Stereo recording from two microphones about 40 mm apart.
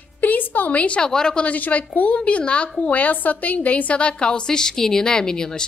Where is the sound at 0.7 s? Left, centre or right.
Left.